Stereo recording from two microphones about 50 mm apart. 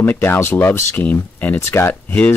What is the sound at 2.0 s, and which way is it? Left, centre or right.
Speech, left.